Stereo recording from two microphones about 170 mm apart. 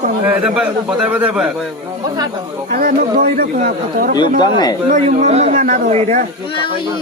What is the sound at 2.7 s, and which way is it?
Speech, 60° right (ahead or behind).